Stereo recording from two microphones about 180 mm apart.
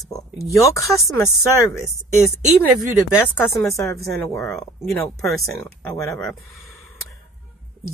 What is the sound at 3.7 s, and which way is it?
Speech, 15° left (ahead or behind).